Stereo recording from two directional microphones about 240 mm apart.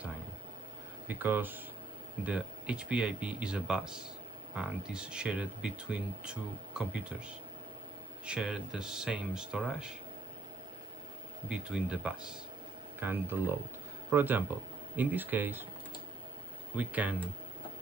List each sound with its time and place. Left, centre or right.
1.0 s speech: centre
8.3 s speech: centre
11.4 s speech: centre
16.7 s speech: centre